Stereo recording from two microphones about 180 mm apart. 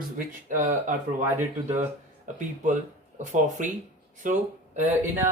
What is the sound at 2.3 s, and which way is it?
Speech, 45° right (ahead or behind).